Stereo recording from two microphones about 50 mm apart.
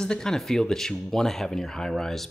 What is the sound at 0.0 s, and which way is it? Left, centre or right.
Speech, centre.